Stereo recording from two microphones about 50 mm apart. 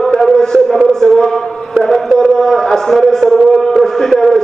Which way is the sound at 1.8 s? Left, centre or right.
Centre.